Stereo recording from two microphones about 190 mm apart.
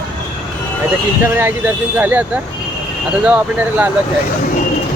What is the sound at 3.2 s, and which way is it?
Speech, 10° right (ahead or behind).